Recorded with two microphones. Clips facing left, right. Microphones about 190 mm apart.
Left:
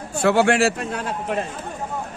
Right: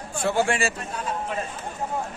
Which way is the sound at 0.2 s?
70° left (ahead or behind).